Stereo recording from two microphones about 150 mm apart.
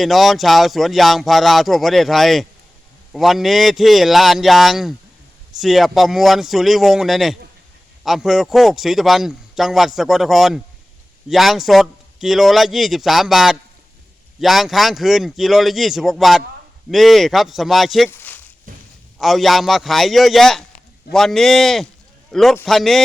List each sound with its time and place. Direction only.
0.0 s speech: centre (ahead or behind)
18.1 s a sound: 10° left (ahead or behind)
19.2 s a man's voice: centre (ahead or behind)